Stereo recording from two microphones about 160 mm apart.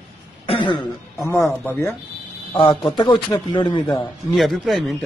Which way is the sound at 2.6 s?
30° left (ahead or behind).